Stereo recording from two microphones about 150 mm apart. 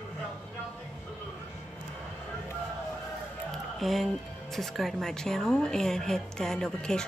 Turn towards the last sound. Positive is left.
turn(degrees=5)  # may be behind; listen again after turning